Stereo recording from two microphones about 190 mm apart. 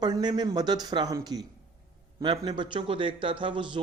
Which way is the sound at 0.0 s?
20° right (ahead or behind).